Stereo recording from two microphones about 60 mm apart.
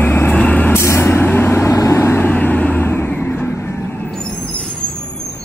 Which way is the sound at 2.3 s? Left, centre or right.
Left.